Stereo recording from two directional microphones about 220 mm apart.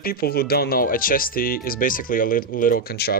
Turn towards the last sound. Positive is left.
turn(degrees=45)  # may be behind; listen again after turning